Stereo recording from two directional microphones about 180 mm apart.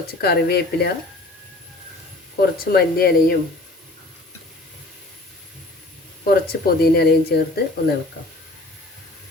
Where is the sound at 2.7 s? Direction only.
55° left (ahead or behind).